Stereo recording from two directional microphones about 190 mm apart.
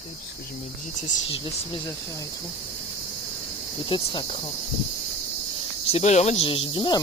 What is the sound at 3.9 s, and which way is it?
Cricket, 25° left (ahead or behind).